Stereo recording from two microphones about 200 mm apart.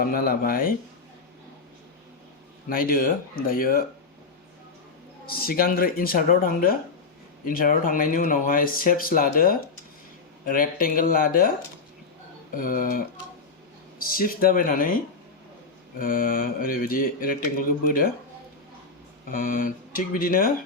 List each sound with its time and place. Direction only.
0.0 s mantra: 45° left (ahead or behind)
2.6 s mantra: 45° left (ahead or behind)
5.2 s mantra: 50° left (ahead or behind)
12.5 s mantra: 45° left (ahead or behind)
14.0 s mantra: 45° left (ahead or behind)
16.0 s mantra: 45° left (ahead or behind)
19.3 s mantra: 45° left (ahead or behind)